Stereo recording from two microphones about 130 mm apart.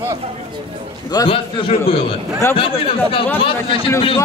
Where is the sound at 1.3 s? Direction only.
45° left (ahead or behind).